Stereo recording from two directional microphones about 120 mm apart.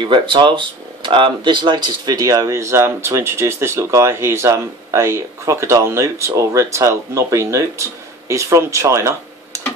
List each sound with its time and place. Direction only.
0.0 s speech: 40° right (ahead or behind); by 9.6 s 25° right (ahead or behind)